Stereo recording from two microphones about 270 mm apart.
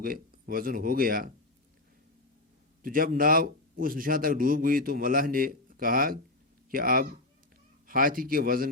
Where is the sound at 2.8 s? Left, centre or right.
Right.